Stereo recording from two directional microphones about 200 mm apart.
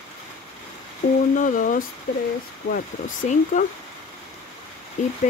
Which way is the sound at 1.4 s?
40° left (ahead or behind).